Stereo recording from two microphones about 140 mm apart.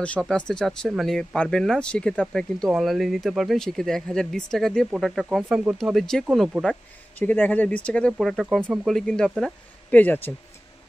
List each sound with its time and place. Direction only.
0.0 s speech: 5° left (ahead or behind)